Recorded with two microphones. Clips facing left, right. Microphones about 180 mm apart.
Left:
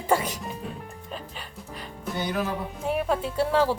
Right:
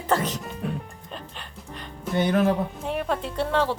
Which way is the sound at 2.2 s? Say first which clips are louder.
Right 8 dB; 55° right (ahead or behind).